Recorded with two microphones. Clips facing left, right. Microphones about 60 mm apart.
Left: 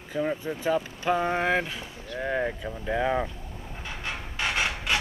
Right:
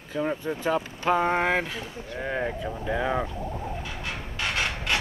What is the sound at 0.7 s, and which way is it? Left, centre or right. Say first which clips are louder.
Speech: right 1 dB; right.